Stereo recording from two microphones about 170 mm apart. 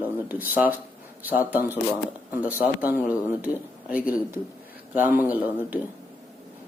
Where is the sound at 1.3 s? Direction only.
10° right (ahead or behind).